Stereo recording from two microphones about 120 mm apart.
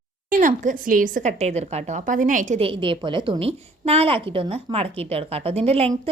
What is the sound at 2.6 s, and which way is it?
A woman's voice, 45° right (ahead or behind).